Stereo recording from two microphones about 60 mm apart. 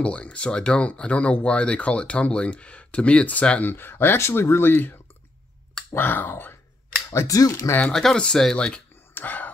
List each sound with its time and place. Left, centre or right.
0.0 s speech: left
3.6 s speech: left
5.9 s speech: left
7.1 s speech: left
7.9 s speech: centre
9.1 s whispering: left